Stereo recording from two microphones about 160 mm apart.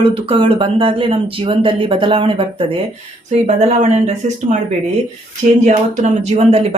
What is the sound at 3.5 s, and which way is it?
Speech, 45° right (ahead or behind).